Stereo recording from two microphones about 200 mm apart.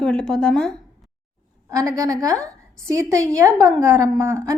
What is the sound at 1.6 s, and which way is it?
A woman's voice, 15° right (ahead or behind).